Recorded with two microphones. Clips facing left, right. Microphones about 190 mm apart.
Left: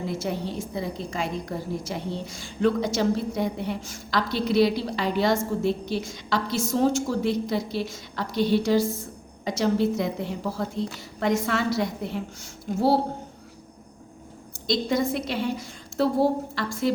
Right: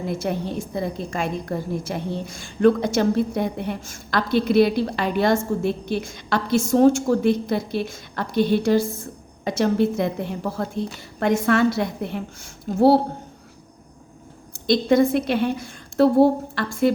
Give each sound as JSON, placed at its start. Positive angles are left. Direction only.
{"t": 0.1, "sound": "a woman's voice", "side_deg": -55}
{"t": 14.7, "sound": "a woman's voice", "side_deg": -55}